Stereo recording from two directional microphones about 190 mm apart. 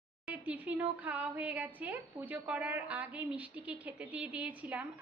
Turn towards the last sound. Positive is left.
turn(degrees=-5)  # may be behind; listen again after turning